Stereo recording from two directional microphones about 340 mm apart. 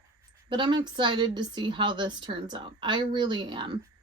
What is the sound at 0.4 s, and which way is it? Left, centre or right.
A woman's voice, centre.